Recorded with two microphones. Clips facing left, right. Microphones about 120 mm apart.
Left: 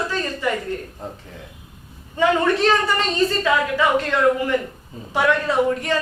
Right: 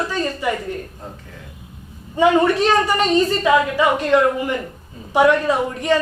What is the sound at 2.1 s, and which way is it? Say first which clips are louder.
A woman's voice: right 3 dB; 15° right (ahead or behind).